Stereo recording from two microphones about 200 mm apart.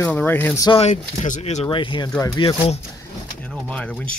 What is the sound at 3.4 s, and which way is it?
Speech, 5° left (ahead or behind).